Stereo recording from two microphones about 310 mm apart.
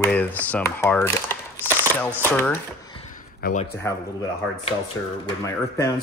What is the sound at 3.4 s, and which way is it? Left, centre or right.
Speech, left.